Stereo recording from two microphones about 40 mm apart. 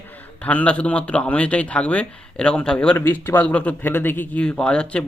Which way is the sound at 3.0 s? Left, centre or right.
Left.